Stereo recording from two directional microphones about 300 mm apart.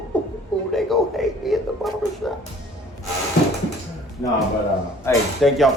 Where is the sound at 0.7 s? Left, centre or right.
Centre.